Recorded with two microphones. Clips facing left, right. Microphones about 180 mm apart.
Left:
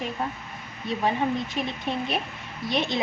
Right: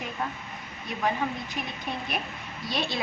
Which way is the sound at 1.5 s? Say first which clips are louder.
Left 5 dB; 25° left (ahead or behind).